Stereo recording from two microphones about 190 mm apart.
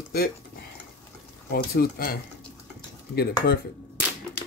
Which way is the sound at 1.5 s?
55° left (ahead or behind).